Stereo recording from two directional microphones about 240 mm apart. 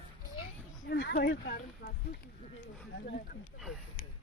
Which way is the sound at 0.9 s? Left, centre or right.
Left.